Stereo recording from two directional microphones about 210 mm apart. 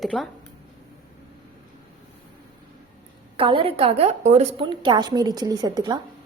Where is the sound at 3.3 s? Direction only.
25° right (ahead or behind).